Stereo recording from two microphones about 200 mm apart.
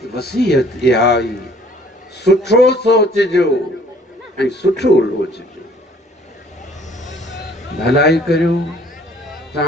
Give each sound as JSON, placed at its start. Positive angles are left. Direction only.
{"t": 0.1, "sound": "speech", "side_deg": 55}
{"t": 7.1, "sound": "vehicle", "side_deg": 35}
{"t": 7.3, "sound": "a man's voice", "side_deg": 55}